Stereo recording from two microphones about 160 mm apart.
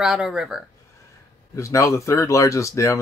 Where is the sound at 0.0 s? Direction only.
5° right (ahead or behind).